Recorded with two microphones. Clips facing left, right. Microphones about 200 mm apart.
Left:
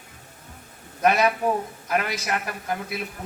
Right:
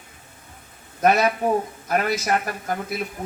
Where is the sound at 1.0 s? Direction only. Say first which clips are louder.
Right 2 dB; 45° right (ahead or behind).